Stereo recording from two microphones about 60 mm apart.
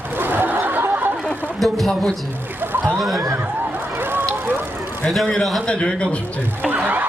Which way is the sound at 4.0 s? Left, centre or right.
Right.